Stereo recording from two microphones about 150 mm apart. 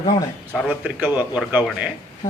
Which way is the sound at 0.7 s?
10° right (ahead or behind).